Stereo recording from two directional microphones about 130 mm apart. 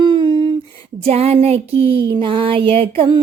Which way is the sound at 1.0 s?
50° right (ahead or behind).